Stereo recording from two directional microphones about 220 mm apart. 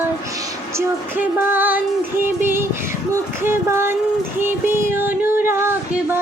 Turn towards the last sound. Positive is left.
turn(degrees=-10)  # may be behind; listen again after turning